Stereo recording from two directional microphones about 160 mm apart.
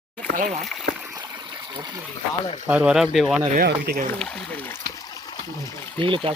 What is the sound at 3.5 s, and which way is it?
Speech, 70° right (ahead or behind).